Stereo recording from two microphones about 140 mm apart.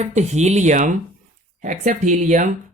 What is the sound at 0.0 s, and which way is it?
Speech, 55° right (ahead or behind).